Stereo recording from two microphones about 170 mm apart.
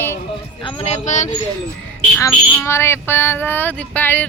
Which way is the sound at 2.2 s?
15° left (ahead or behind).